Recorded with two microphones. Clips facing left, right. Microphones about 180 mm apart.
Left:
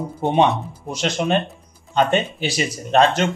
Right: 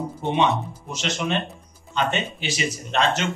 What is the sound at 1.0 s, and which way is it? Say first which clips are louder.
A man's voice: left 5 dB; 35° left (ahead or behind).